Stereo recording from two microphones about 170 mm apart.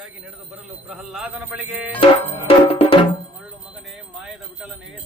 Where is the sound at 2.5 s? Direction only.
35° left (ahead or behind).